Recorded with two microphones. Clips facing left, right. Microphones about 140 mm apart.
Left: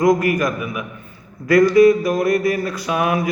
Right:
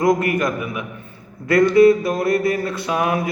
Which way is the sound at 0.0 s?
25° right (ahead or behind).